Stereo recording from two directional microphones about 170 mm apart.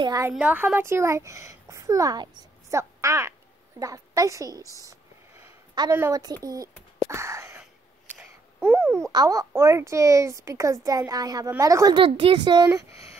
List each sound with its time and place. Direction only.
0.0 s a woman's voice: 20° right (ahead or behind)
0.3 s a woman's voice: 10° right (ahead or behind); by 12.7 s 25° right (ahead or behind)